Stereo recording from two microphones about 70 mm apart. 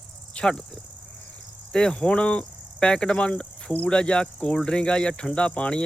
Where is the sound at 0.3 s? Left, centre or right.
Centre.